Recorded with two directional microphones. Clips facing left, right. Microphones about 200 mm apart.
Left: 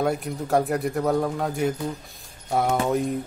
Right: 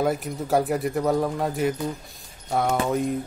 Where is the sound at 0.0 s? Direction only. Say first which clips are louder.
Even; centre (ahead or behind).